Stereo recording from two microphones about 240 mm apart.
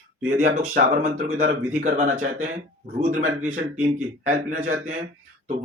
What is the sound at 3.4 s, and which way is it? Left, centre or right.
Speech, right.